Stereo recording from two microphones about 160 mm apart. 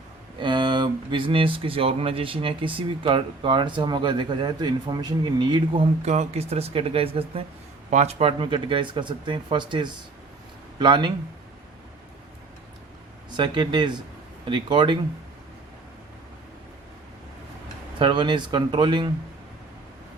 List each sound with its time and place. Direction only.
0.3 s speech: 30° right (ahead or behind)
13.3 s speech: 30° right (ahead or behind)
18.0 s speech: 30° right (ahead or behind)